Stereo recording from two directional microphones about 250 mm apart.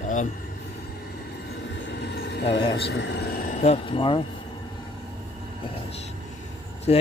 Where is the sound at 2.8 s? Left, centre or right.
Left; by 4.2 s centre.